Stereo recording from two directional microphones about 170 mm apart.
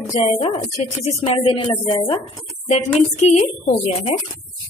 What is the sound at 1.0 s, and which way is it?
A woman's voice, 30° left (ahead or behind).